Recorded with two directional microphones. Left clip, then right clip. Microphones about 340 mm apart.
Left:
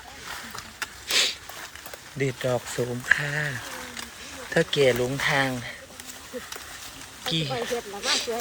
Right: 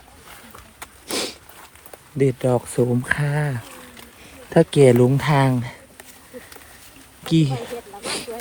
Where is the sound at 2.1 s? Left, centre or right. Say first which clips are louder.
Right 7 dB; centre.